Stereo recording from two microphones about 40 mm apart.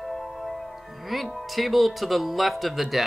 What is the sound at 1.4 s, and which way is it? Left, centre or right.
Speech, centre.